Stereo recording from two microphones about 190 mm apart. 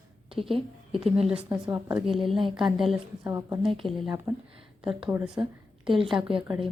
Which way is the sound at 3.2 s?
15° right (ahead or behind).